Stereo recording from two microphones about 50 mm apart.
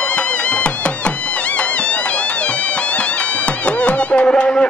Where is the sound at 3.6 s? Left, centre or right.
Left.